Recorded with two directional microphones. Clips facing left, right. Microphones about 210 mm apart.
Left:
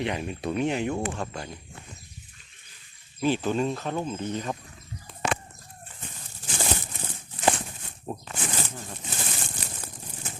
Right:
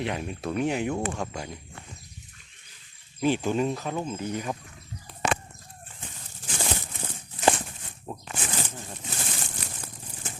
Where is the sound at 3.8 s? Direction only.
Centre (ahead or behind).